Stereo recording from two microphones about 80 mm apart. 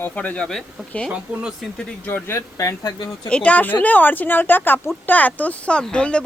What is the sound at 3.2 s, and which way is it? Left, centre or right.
Speech, centre.